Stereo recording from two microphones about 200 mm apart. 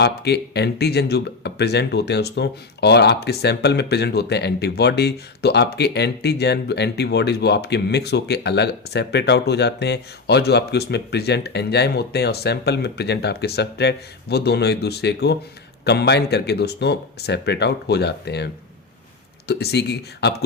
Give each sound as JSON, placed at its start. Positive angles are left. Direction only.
{"t": 0.0, "sound": "speech", "side_deg": 55}